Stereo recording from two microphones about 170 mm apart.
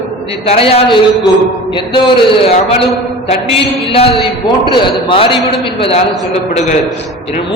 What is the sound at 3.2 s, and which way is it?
A man's voice, 35° left (ahead or behind).